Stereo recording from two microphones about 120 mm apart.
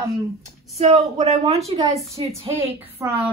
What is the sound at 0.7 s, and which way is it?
A woman's voice, 60° right (ahead or behind).